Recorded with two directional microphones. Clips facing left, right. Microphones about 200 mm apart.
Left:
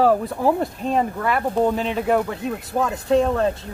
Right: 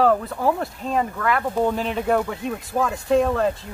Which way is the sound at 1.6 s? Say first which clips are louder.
Left 1 dB; centre (ahead or behind).